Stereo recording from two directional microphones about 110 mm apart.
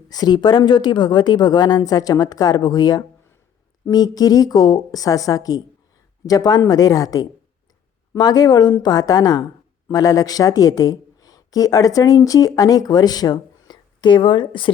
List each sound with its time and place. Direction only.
0.1 s a woman's voice: 40° left (ahead or behind)